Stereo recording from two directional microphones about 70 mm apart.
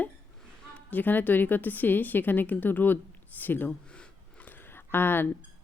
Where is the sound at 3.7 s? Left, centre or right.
Centre.